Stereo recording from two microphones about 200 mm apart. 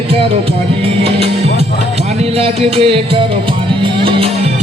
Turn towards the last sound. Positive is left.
turn(degrees=-25)  # may be behind; listen again after turning